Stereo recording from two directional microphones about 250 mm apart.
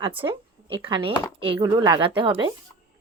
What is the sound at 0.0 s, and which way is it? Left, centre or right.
Speech, right.